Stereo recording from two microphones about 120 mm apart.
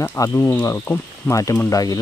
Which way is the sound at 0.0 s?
20° left (ahead or behind).